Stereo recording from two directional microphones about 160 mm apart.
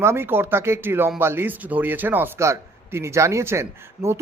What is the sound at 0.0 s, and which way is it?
Speech, 15° right (ahead or behind).